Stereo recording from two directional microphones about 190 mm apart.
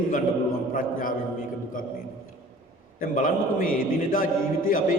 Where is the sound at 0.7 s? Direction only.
45° left (ahead or behind).